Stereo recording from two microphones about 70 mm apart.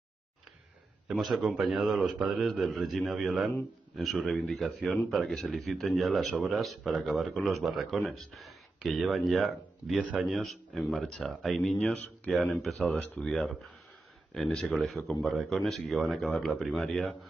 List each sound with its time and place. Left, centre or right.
1.1 s speech: centre
12.8 s speech: centre
14.3 s speech: centre